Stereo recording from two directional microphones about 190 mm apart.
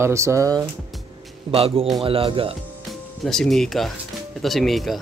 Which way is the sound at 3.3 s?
Centre (ahead or behind).